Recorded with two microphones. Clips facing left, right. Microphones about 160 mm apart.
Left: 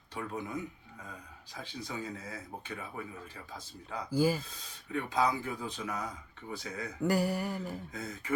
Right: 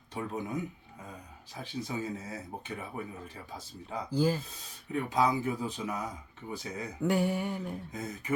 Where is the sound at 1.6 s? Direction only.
25° right (ahead or behind).